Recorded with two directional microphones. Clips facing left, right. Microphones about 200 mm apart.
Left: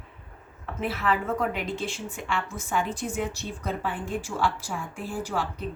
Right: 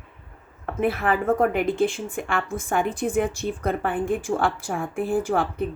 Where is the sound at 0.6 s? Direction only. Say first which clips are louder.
Right 5 dB; 55° right (ahead or behind).